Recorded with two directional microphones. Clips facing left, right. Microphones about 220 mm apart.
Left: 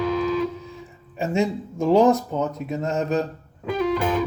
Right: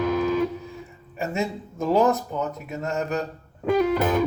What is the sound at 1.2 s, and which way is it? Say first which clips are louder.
Speech: left 4 dB; 15° left (ahead or behind).